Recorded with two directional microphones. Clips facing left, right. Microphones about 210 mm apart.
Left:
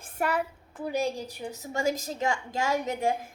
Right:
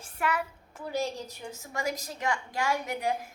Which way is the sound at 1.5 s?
25° left (ahead or behind).